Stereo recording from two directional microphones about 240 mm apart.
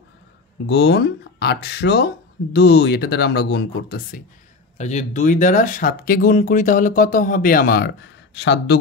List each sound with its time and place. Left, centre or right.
0.7 s speech: left
4.7 s speech: left